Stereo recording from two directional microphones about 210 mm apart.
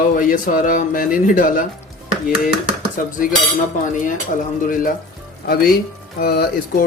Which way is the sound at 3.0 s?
45° left (ahead or behind).